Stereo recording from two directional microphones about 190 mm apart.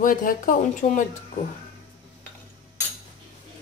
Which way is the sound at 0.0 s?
45° left (ahead or behind).